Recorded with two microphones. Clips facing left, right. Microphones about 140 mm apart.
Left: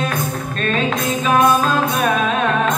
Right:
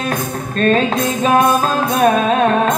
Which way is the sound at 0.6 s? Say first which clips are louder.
Right 6 dB; 40° right (ahead or behind).